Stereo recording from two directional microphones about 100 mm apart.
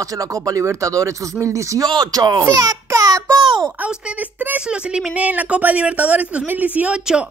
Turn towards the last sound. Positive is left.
turn(degrees=-10)  # may be behind; listen again after turning